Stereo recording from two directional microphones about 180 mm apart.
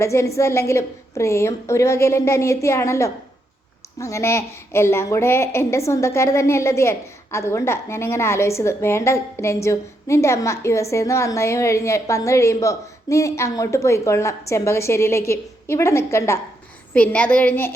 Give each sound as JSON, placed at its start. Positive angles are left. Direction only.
{"t": 0.0, "sound": "a woman's voice", "side_deg": 15}